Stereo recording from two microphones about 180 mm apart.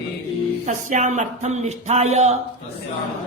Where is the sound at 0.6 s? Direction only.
40° right (ahead or behind).